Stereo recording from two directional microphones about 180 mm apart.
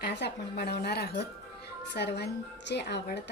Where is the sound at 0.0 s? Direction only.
70° left (ahead or behind).